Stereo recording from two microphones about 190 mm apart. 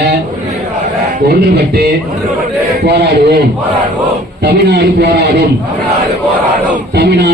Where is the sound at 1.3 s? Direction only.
60° right (ahead or behind).